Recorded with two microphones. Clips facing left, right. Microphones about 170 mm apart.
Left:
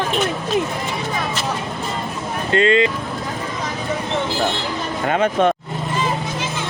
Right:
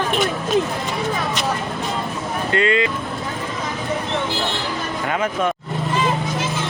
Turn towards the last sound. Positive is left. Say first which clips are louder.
# left 4 dB
turn(degrees=30)  # may be behind; listen again after turning